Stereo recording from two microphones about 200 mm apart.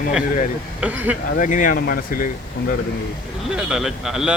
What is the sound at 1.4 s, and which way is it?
Speech, 40° left (ahead or behind).